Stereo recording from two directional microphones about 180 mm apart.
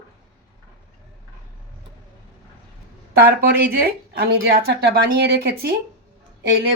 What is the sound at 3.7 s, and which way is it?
A woman's voice, 55° right (ahead or behind).